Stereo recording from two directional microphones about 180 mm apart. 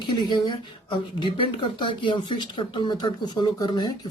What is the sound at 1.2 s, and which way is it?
Speech, 30° left (ahead or behind).